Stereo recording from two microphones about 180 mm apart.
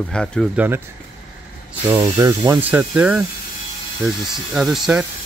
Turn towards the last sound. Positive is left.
turn(degrees=-5)  # may be behind; listen again after turning